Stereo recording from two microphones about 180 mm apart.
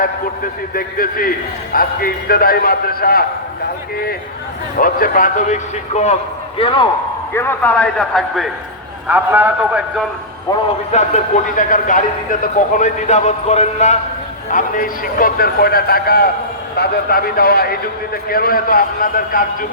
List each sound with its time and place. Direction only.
0.7 s a man's voice: 55° left (ahead or behind)
4.8 s a man's voice: 50° left (ahead or behind); by 6.8 s 30° left (ahead or behind)
7.3 s a man's voice: 10° left (ahead or behind)
9.0 s a man's voice: 10° right (ahead or behind)
10.9 s a man's voice: 40° left (ahead or behind)